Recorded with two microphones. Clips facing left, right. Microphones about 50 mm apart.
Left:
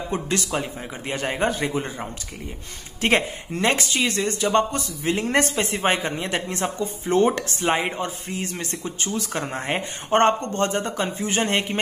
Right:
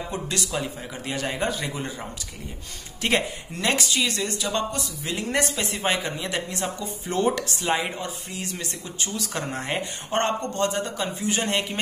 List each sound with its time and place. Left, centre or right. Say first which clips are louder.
0.1 s speech: left 5 dB; left